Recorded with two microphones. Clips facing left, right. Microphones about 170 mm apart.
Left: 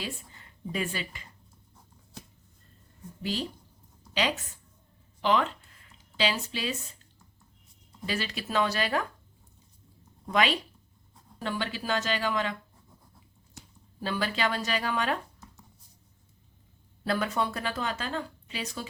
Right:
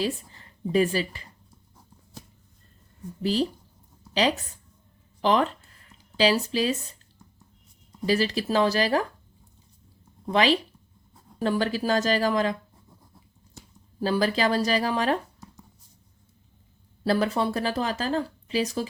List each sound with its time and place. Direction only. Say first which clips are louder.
0.0 s speech: right 10 dB; 35° right (ahead or behind)
5.2 s speech: right 4 dB; 40° right (ahead or behind)
8.0 s speech: right 9 dB; 35° right (ahead or behind)
10.2 s speech: right 5 dB; 30° right (ahead or behind)
14.0 s speech: right 6 dB; 35° right (ahead or behind)
17.0 s speech: right 5 dB; 30° right (ahead or behind)